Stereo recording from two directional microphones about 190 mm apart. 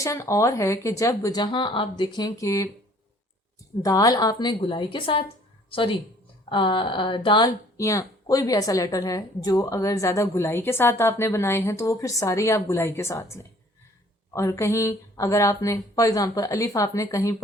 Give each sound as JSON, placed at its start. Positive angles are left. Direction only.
{"t": 0.0, "sound": "speech", "side_deg": 15}
{"t": 3.8, "sound": "a woman's voice", "side_deg": 20}
{"t": 6.5, "sound": "speech", "side_deg": 25}
{"t": 14.3, "sound": "speech", "side_deg": 15}